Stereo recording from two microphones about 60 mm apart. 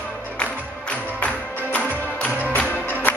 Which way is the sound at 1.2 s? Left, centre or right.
Left.